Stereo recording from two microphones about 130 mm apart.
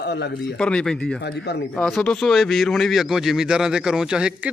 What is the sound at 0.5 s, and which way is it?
A man's voice, 5° left (ahead or behind).